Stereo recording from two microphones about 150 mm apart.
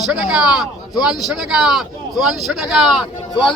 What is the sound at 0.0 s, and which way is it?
Speech, 5° right (ahead or behind).